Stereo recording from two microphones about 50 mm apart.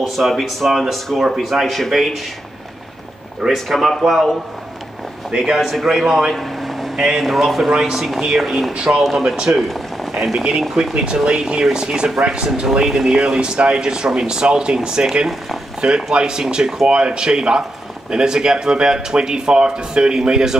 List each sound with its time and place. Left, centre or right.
0.0 s speech: centre
3.5 s speech: centre
8.7 s speech: centre
9.5 s speech: centre